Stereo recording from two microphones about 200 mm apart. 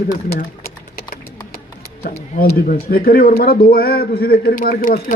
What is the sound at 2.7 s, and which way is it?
A man's voice, 50° left (ahead or behind).